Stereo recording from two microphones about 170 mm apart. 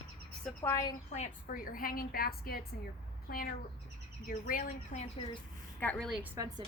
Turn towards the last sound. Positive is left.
turn(degrees=-20)  # may be behind; listen again after turning